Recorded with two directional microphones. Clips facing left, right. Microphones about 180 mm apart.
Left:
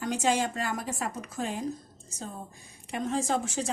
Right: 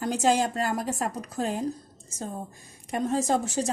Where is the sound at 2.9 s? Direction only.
40° right (ahead or behind).